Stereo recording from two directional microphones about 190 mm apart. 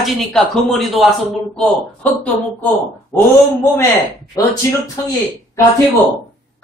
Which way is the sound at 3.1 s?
10° left (ahead or behind).